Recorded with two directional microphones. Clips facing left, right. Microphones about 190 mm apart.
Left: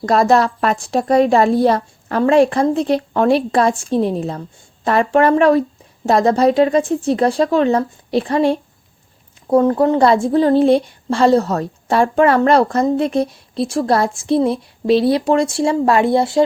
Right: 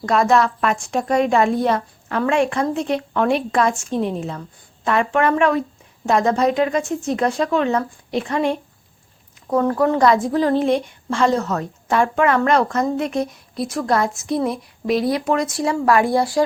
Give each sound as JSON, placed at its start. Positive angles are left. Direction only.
{"t": 0.0, "sound": "a woman's voice", "side_deg": 35}